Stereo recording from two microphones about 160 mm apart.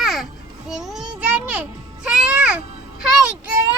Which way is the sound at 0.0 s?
Centre (ahead or behind).